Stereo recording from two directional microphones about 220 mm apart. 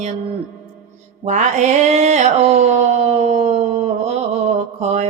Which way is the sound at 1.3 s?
30° right (ahead or behind).